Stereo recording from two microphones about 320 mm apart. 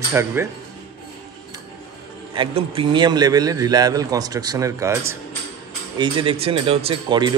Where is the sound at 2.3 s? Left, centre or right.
Centre.